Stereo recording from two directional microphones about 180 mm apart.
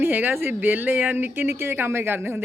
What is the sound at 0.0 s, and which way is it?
A woman's voice, 10° right (ahead or behind).